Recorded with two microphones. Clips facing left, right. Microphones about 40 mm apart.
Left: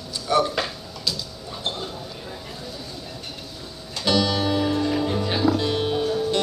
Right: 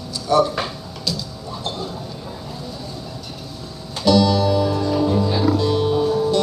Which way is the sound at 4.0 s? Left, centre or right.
Left.